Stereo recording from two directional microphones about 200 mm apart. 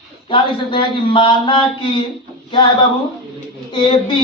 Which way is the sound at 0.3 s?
25° left (ahead or behind).